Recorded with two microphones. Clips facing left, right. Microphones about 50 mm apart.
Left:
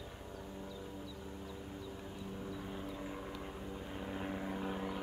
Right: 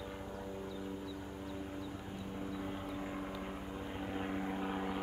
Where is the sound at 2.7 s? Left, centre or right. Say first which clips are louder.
Right 2 dB; centre.